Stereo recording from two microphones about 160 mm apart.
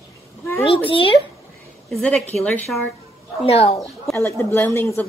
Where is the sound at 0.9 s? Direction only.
35° left (ahead or behind).